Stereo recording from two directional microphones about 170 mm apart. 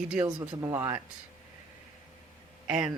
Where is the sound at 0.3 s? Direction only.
20° right (ahead or behind).